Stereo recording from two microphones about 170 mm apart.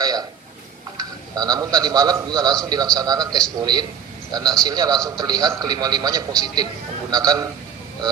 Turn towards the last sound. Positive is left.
turn(degrees=-20)  # may be behind; listen again after turning